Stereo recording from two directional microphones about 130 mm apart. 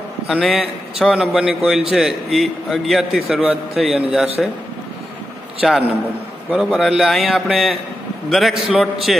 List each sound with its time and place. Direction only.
0.3 s a man's voice: centre (ahead or behind)
5.6 s a man's voice: 5° right (ahead or behind)